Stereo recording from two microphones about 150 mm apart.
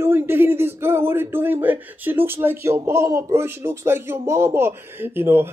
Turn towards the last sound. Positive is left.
turn(degrees=-15)  # may be behind; listen again after turning